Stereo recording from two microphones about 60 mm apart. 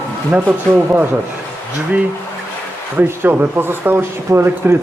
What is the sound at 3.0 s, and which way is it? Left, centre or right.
A man's voice, right.